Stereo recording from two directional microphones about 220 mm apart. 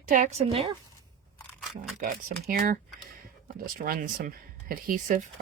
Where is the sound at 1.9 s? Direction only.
40° right (ahead or behind).